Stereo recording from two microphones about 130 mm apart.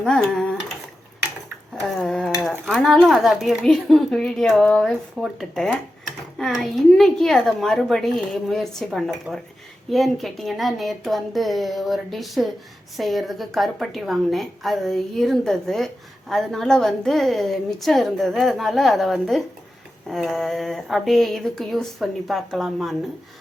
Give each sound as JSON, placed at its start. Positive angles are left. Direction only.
{"t": 0.0, "sound": "speech", "side_deg": 5}
{"t": 1.7, "sound": "a sound", "side_deg": 5}
{"t": 2.4, "sound": "speech", "side_deg": 0}